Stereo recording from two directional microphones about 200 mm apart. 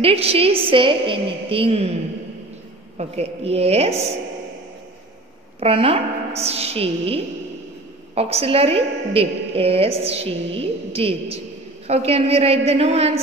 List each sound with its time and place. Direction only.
0.0 s a woman's voice: 30° right (ahead or behind)
3.0 s a woman's voice: 30° right (ahead or behind)
5.6 s a woman's voice: 30° right (ahead or behind)